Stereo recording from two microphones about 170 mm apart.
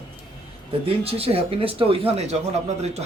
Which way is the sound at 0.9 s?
35° right (ahead or behind).